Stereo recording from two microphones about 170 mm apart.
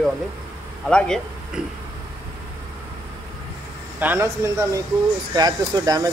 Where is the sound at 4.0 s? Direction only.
10° right (ahead or behind).